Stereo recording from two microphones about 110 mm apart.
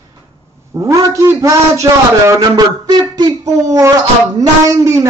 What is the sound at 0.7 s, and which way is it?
Speech, 30° right (ahead or behind).